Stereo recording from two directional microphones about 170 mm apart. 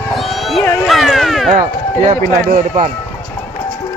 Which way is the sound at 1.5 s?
50° right (ahead or behind).